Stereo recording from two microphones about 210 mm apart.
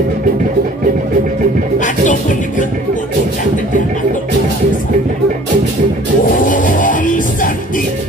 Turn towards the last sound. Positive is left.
turn(degrees=40)  # may be behind; listen again after turning